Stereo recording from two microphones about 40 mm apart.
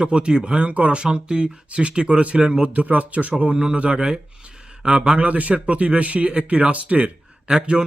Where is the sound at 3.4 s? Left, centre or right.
Right.